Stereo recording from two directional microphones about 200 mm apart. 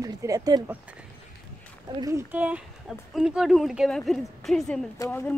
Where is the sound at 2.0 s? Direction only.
15° right (ahead or behind); by 4.8 s centre (ahead or behind).